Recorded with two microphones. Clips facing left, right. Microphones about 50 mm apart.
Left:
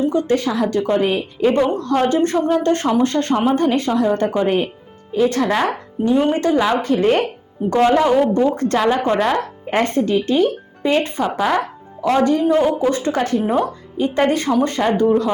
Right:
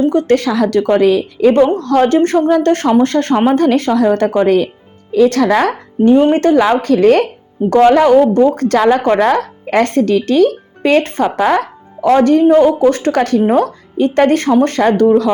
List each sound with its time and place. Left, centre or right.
0.1 s a woman's voice: right
3.0 s a woman's voice: right
5.1 s a woman's voice: right
6.3 s a woman's voice: right
13.4 s speech: right